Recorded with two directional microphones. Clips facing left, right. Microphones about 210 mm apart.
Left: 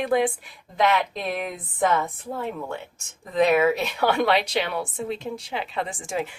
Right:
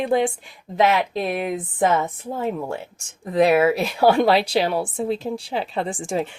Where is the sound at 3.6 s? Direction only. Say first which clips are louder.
Right 4 dB; 30° right (ahead or behind).